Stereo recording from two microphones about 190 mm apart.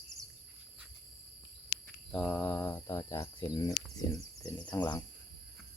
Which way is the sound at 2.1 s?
5° left (ahead or behind).